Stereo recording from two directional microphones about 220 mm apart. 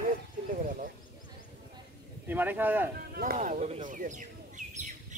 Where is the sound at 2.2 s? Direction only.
10° right (ahead or behind).